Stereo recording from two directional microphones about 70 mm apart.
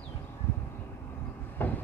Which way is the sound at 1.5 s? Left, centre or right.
Left.